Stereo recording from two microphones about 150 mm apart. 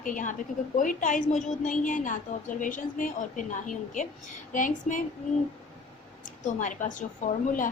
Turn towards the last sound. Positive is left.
turn(degrees=60)  # may be behind; listen again after turning